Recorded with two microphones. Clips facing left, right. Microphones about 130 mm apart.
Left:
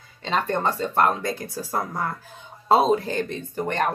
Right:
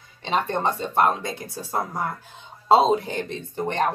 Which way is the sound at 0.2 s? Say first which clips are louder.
Even; 20° right (ahead or behind).